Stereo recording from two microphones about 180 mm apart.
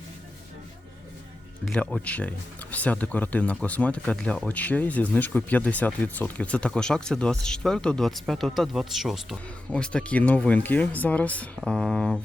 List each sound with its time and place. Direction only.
1.6 s speech: 5° left (ahead or behind)